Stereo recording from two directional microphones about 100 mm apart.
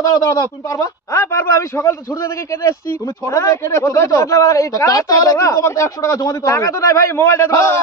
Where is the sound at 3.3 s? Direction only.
30° left (ahead or behind).